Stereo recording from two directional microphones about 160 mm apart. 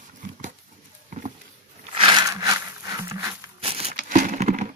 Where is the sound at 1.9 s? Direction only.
30° right (ahead or behind).